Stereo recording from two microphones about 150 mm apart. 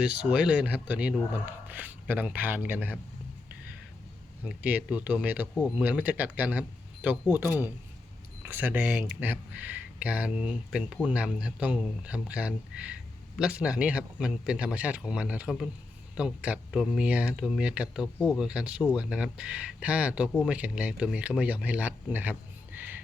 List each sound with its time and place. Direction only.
0.0 s speech: 5° right (ahead or behind)
4.4 s speech: 10° right (ahead or behind)
8.4 s speech: 10° right (ahead or behind)